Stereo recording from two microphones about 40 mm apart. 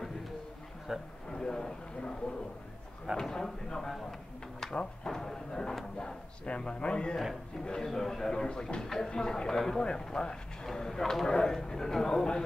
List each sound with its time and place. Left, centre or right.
0.9 s a man's voice: centre
1.3 s a sound: centre
3.2 s speech: centre
4.7 s drawer open or close: centre
6.4 s a man's voice: left
7.8 s speech: centre
8.5 s a man's voice: left
8.8 s speech: centre
9.1 s speech: centre
11.2 s a man's voice: centre